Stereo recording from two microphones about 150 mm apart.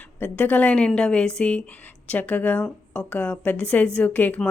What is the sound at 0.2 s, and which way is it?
Speech, 10° left (ahead or behind).